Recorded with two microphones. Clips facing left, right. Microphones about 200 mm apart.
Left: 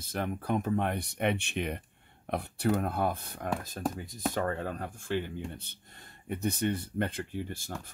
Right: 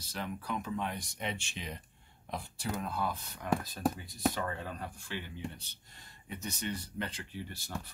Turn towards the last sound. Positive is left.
turn(degrees=50)  # may be behind; listen again after turning